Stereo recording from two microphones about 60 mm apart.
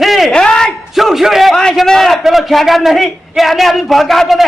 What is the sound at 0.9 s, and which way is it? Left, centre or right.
A man's voice, centre.